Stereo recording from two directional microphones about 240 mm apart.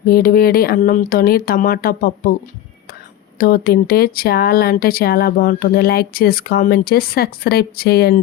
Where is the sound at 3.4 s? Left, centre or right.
Left.